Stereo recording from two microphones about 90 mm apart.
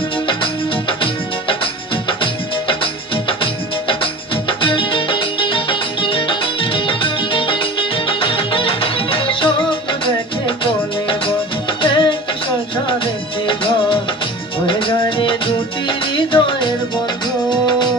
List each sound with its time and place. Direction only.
0.3 s music: 70° left (ahead or behind)
13.5 s music: 70° left (ahead or behind)